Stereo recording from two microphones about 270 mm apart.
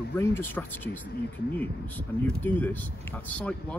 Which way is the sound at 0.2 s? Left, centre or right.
Centre.